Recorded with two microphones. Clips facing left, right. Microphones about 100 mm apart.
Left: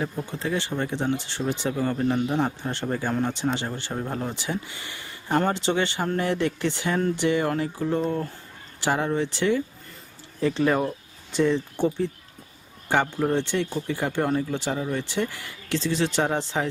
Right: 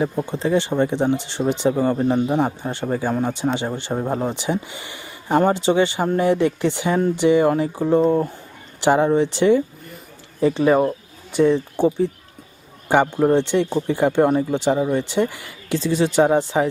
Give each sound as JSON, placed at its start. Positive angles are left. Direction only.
{"t": 0.3, "sound": "speech", "side_deg": -20}
{"t": 13.1, "sound": "speech", "side_deg": -20}